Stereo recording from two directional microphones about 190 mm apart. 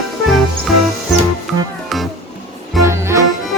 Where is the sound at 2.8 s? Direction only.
15° right (ahead or behind).